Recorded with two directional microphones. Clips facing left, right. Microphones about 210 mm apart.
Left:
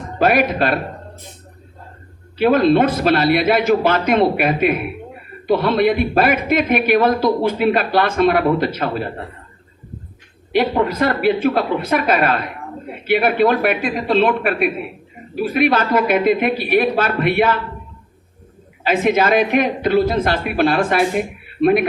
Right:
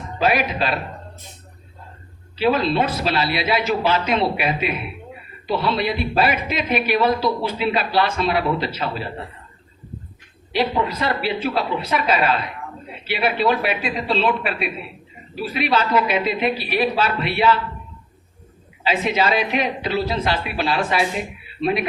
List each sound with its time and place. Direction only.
0.2 s a woman's voice: 55° left (ahead or behind)
2.4 s a woman's voice: 50° left (ahead or behind)
10.5 s a woman's voice: 50° left (ahead or behind)
18.8 s a woman's voice: 50° left (ahead or behind)